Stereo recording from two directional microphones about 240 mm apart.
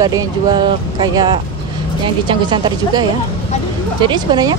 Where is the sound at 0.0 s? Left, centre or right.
Centre.